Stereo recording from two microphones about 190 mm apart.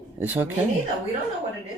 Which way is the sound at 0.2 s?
10° right (ahead or behind).